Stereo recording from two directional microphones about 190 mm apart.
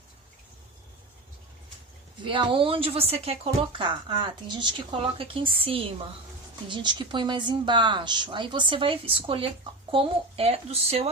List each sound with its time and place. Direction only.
2.2 s speech: 25° right (ahead or behind)